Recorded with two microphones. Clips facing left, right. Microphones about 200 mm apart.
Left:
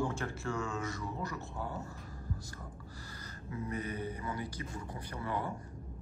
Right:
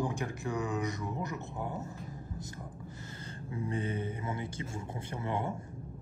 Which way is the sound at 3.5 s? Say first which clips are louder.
Right 3 dB; 30° right (ahead or behind).